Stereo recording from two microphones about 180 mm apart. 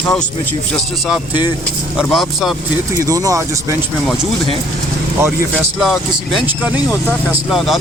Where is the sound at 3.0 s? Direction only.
20° right (ahead or behind).